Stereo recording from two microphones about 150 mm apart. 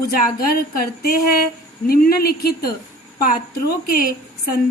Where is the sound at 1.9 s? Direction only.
90° left.